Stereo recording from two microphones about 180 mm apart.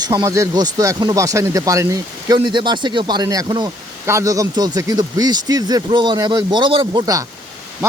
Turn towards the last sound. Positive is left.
turn(degrees=-20)  # may be behind; listen again after turning